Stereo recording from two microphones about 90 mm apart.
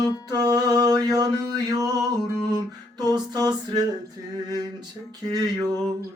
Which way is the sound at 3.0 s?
50° right (ahead or behind).